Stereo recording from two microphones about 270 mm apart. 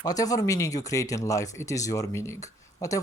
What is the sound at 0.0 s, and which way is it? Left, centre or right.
Speech, centre.